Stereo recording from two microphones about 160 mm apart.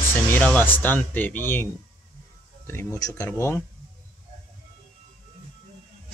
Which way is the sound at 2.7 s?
20° left (ahead or behind).